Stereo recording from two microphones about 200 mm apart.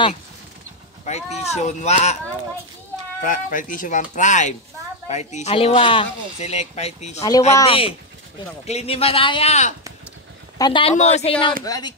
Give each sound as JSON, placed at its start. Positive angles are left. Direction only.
{"t": 1.0, "sound": "speech", "side_deg": 35}
{"t": 3.2, "sound": "a man's voice", "side_deg": 40}
{"t": 11.6, "sound": "speech", "side_deg": 20}